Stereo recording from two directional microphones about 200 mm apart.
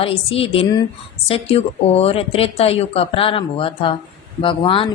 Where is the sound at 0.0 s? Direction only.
30° left (ahead or behind).